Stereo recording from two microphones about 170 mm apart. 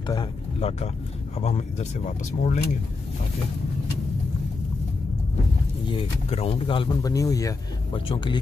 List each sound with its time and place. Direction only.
0.0 s speech: 25° left (ahead or behind); by 2.6 s 45° left (ahead or behind)
5.9 s speech: 35° left (ahead or behind)
7.9 s speech: 30° left (ahead or behind)